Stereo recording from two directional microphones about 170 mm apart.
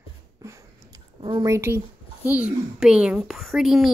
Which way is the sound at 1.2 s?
25° right (ahead or behind).